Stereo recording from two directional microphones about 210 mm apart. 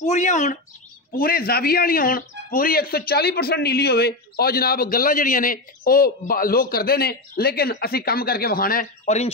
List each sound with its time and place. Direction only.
0.0 s speech: 35° left (ahead or behind)